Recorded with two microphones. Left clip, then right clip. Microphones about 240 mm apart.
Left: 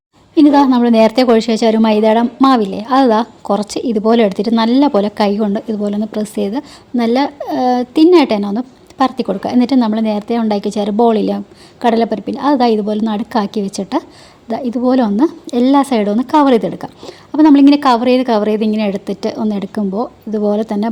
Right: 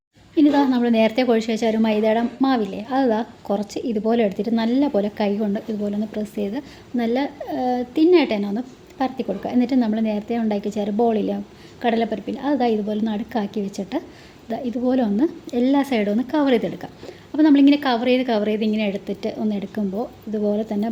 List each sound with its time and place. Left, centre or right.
0.3 s a woman's voice: left